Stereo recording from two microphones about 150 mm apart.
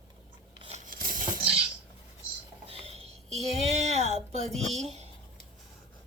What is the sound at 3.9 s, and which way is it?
Speech, 45° right (ahead or behind).